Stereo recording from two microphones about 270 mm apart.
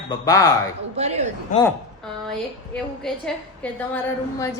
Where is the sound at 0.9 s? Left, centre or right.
Right.